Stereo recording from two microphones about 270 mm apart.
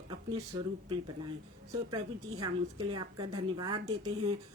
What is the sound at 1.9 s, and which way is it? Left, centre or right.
A woman's voice, centre.